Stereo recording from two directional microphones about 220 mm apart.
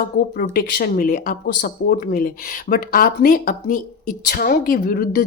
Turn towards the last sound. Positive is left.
turn(degrees=45)  # may be behind; listen again after turning